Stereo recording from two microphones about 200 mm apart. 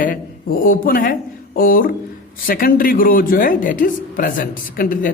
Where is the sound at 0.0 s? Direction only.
45° left (ahead or behind).